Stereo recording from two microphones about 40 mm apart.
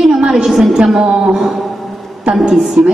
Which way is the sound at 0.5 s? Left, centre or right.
Centre.